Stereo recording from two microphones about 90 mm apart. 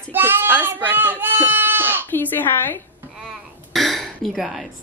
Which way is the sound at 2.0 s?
20° left (ahead or behind).